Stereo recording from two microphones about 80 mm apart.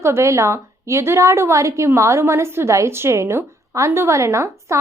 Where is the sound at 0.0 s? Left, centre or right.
Right.